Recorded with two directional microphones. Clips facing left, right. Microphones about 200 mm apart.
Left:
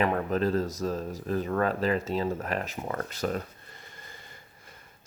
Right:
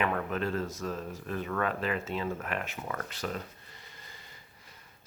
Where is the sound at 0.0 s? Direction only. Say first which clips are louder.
Left 5 dB; 35° left (ahead or behind).